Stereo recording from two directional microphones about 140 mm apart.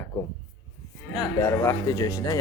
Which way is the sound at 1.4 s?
20° left (ahead or behind).